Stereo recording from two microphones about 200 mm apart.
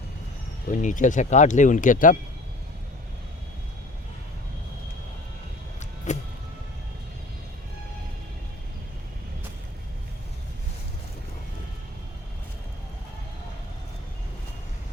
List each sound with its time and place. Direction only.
0.7 s speech: 40° left (ahead or behind)
6.1 s music: 35° left (ahead or behind)